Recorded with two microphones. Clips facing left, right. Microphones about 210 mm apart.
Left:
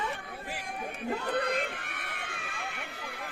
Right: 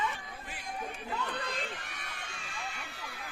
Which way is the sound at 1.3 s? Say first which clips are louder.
Left 8 dB; 60° left (ahead or behind).